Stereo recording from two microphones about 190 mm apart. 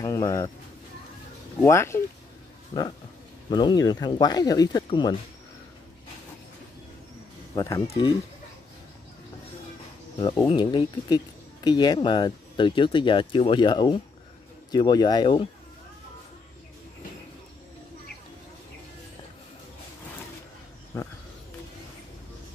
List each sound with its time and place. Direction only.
0.0 s speech: 15° left (ahead or behind)
1.6 s speech: 15° left (ahead or behind)
2.7 s speech: 25° left (ahead or behind)
7.5 s speech: 15° left (ahead or behind)
10.4 s speech: 25° left (ahead or behind)
20.9 s a sound: 15° left (ahead or behind)